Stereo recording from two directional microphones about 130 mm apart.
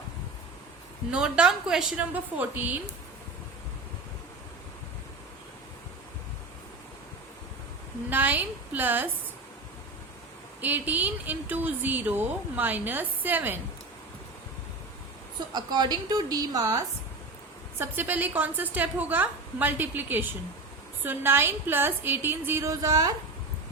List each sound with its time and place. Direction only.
1.1 s a woman's voice: 5° right (ahead or behind)
8.1 s a woman's voice: 15° right (ahead or behind)
10.6 s a woman's voice: 15° right (ahead or behind)
15.5 s a woman's voice: 30° right (ahead or behind)
17.7 s a woman's voice: 15° right (ahead or behind)